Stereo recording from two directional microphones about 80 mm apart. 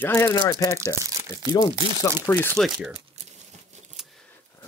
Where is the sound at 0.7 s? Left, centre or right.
Right.